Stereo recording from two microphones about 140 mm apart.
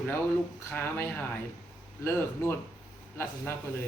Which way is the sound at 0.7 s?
15° left (ahead or behind).